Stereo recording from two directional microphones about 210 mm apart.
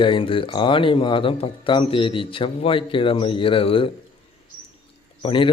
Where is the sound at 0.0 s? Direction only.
25° left (ahead or behind).